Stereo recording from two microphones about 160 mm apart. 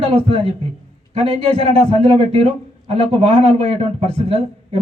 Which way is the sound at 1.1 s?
40° right (ahead or behind).